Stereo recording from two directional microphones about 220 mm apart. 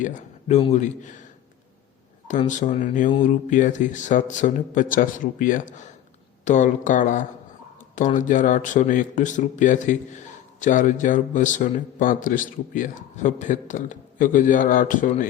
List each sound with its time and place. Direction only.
0.0 s speech: 35° left (ahead or behind)
2.5 s a man's voice: 35° left (ahead or behind)